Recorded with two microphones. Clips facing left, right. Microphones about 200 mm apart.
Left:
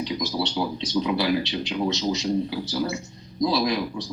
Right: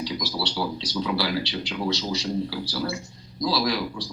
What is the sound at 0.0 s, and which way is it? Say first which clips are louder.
Speech: left 3 dB; 20° left (ahead or behind).